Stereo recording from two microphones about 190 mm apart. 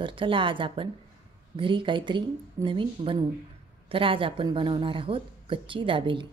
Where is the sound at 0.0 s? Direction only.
25° right (ahead or behind).